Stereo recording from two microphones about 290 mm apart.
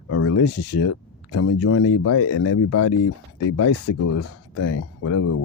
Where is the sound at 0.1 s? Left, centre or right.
Left.